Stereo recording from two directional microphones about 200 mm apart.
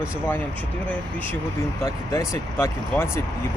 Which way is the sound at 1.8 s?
15° left (ahead or behind).